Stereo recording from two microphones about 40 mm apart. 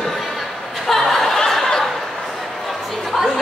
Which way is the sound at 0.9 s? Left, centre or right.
Centre.